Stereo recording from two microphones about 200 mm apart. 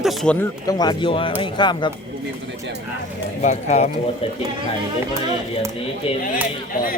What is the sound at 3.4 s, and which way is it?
Speech, 35° left (ahead or behind).